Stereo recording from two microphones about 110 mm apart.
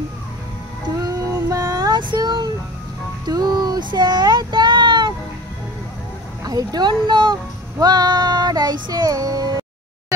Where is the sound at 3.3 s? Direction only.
35° right (ahead or behind).